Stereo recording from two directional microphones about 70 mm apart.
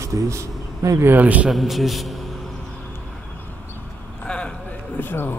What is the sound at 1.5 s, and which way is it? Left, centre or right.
Speech, centre.